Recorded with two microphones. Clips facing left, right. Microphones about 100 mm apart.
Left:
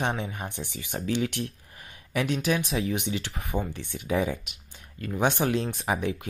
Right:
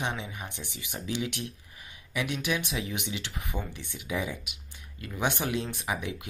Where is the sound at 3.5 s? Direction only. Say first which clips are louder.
Left 9 dB; 45° left (ahead or behind).